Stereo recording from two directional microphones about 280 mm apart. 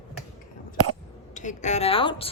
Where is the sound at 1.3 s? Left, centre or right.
Left.